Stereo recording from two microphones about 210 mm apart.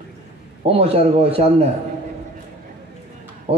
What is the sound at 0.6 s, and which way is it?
Speech, 30° right (ahead or behind).